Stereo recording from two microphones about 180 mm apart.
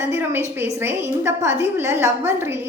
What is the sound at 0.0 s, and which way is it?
A woman's voice, 10° right (ahead or behind).